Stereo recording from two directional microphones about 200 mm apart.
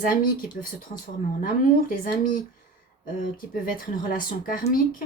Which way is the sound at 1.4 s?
45° left (ahead or behind).